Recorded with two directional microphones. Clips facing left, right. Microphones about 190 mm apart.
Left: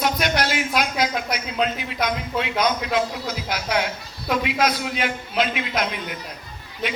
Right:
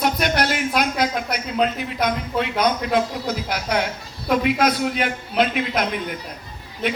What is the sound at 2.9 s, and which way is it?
Speech, 55° right (ahead or behind).